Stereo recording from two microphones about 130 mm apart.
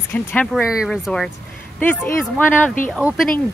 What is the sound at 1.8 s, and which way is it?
Speech, 15° left (ahead or behind).